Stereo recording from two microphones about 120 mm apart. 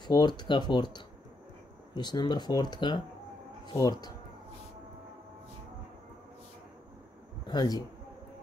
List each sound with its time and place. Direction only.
0.0 s speech: 35° left (ahead or behind)
7.4 s a man's voice: 35° left (ahead or behind)